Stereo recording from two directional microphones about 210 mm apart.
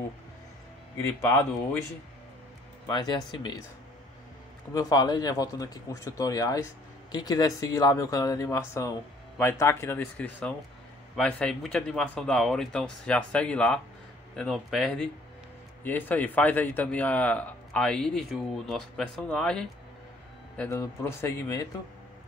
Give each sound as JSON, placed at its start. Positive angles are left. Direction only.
{"t": 0.9, "sound": "a man's voice", "side_deg": 10}
{"t": 2.9, "sound": "speech", "side_deg": 20}
{"t": 4.7, "sound": "a man's voice", "side_deg": 20}